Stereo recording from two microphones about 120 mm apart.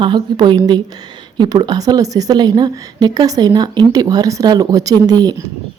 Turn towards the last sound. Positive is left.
turn(degrees=-35)  # may be behind; listen again after turning